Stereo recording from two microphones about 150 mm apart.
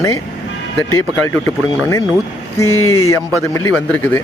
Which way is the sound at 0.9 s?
20° left (ahead or behind).